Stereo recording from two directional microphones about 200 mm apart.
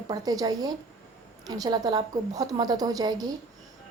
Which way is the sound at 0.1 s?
20° right (ahead or behind).